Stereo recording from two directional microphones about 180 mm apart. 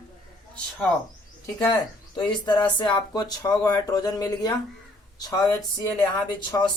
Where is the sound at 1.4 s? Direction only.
20° left (ahead or behind).